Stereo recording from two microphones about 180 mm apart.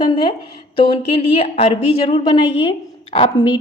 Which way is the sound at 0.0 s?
30° left (ahead or behind).